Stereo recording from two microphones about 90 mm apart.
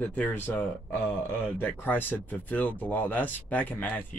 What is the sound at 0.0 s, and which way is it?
Speech, 15° left (ahead or behind).